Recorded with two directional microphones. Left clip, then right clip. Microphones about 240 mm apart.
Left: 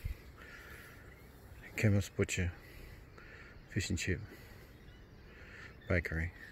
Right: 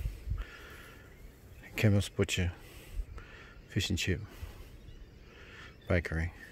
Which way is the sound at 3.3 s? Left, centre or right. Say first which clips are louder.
Right 3 dB; centre.